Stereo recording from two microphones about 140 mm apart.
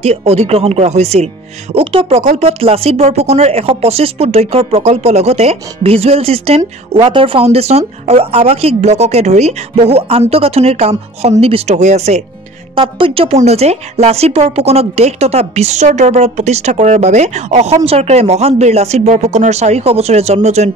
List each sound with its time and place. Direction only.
0.0 s speech: 45° right (ahead or behind)
12.7 s speech: 40° right (ahead or behind)